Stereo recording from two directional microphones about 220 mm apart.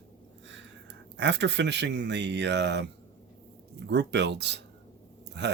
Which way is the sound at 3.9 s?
50° right (ahead or behind).